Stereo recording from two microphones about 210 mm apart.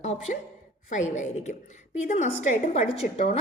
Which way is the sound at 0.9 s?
35° left (ahead or behind).